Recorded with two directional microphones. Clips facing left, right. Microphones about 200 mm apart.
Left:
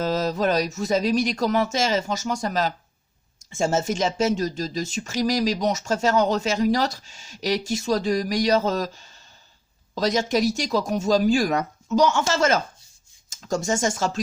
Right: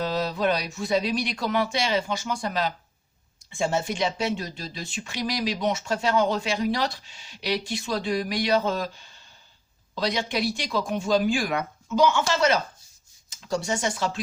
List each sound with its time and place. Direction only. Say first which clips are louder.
0.0 s speech: left 3 dB; 40° left (ahead or behind)